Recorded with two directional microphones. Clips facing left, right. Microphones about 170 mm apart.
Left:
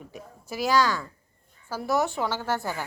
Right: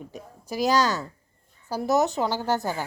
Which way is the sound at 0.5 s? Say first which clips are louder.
Right 2 dB; 40° right (ahead or behind).